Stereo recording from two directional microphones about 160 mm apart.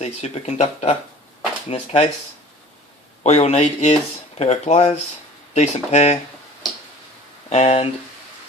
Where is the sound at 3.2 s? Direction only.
45° left (ahead or behind).